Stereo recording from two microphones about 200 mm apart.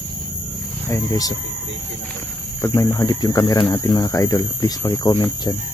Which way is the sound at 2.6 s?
10° left (ahead or behind).